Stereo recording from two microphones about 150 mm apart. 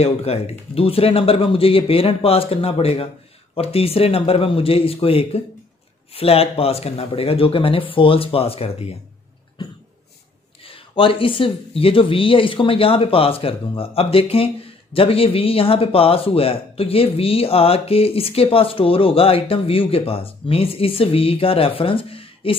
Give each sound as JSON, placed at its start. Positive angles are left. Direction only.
{"t": 0.0, "sound": "speech", "side_deg": 45}
{"t": 10.6, "sound": "speech", "side_deg": 35}